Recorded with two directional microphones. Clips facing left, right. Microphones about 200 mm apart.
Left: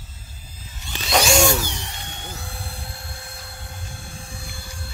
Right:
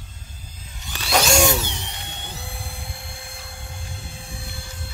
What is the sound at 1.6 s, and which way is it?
Tools, 20° right (ahead or behind).